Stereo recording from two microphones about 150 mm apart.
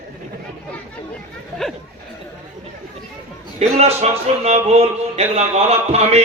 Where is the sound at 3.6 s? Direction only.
45° right (ahead or behind).